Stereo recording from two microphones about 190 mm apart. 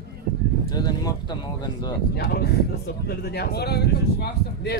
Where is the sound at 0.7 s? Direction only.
20° left (ahead or behind).